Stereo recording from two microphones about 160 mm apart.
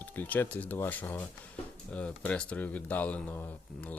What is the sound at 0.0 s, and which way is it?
Speech, 10° left (ahead or behind).